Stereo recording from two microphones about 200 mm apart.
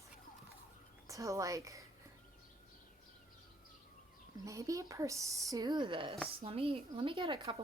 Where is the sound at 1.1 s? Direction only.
15° right (ahead or behind).